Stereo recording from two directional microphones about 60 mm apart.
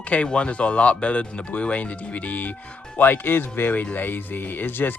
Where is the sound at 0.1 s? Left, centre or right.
Centre.